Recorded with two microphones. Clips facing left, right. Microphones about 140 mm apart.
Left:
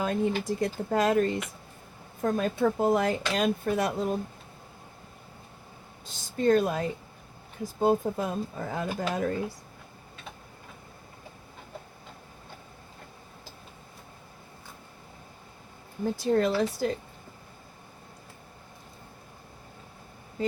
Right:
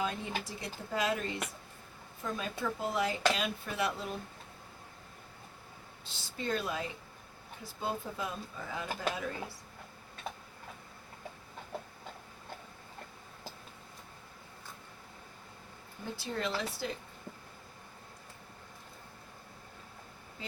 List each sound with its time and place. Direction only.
0.0 s speech: 50° left (ahead or behind)
6.1 s speech: 50° left (ahead or behind)
16.3 s speech: 50° left (ahead or behind)